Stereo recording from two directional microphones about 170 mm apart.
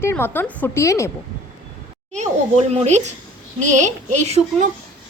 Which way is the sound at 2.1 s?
40° right (ahead or behind).